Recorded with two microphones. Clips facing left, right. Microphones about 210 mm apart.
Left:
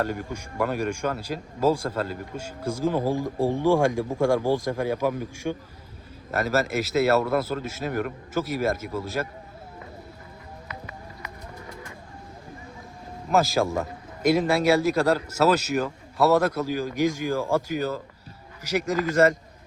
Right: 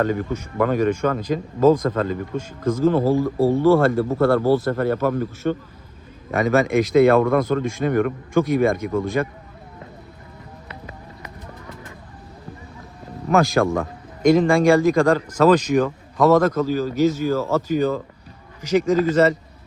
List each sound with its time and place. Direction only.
0.0 s speech: 10° left (ahead or behind)
13.3 s speech: centre (ahead or behind)